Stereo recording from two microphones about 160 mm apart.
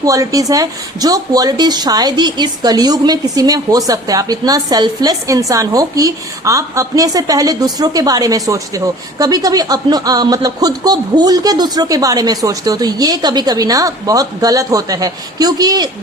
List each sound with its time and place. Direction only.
0.0 s speech: 20° right (ahead or behind)